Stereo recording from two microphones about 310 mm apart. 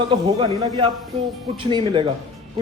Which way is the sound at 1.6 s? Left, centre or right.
Centre.